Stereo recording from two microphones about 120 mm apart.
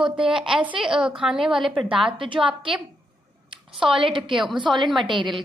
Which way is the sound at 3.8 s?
45° right (ahead or behind).